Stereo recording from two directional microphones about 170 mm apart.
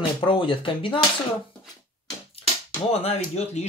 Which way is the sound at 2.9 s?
35° left (ahead or behind).